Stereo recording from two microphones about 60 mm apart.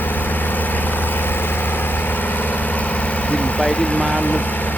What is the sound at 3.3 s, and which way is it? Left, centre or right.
Speech, left.